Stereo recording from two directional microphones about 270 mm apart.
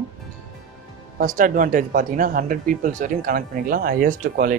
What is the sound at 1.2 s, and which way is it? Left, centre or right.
Speech, right.